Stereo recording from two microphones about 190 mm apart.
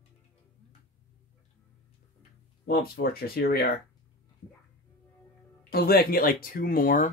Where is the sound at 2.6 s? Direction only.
55° left (ahead or behind).